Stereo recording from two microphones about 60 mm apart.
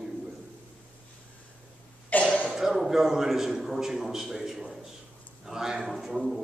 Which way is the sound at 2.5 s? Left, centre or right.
Centre.